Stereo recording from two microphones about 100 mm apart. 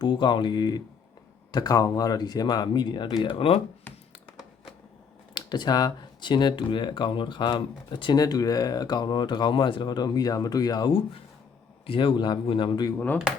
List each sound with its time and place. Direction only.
0.0 s speech: 50° left (ahead or behind)
3.2 s speech: 65° left (ahead or behind)
5.3 s speech: 45° left (ahead or behind)
8.2 s speech: 40° left (ahead or behind)
11.9 s speech: 55° left (ahead or behind)